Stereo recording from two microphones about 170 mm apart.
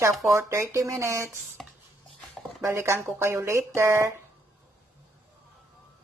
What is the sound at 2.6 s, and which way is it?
Speech, 15° right (ahead or behind).